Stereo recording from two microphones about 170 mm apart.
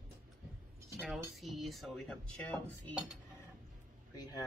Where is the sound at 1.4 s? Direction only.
Centre (ahead or behind).